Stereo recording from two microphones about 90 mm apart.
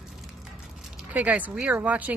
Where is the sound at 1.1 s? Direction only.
15° right (ahead or behind).